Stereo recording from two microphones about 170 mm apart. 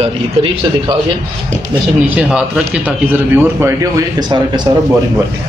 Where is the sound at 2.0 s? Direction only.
5° right (ahead or behind).